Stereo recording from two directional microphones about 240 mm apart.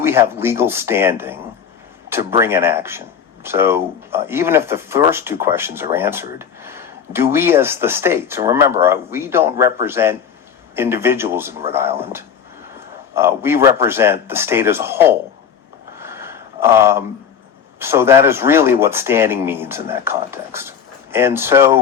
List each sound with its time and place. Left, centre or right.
0.0 s speech: centre
13.1 s speech: centre
16.0 s a sound: centre
17.7 s speech: centre